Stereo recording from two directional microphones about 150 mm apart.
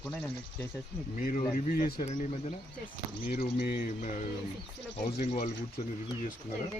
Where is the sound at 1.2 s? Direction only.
70° left (ahead or behind).